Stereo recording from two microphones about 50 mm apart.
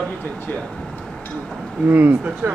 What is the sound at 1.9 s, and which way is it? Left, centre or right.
Speech, right.